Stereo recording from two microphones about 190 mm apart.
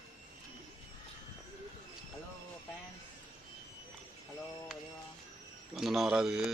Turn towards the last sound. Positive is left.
turn(degrees=-5)  # may be behind; listen again after turning